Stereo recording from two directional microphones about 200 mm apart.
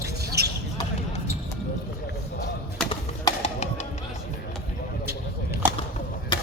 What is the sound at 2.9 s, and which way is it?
Bird, 30° left (ahead or behind).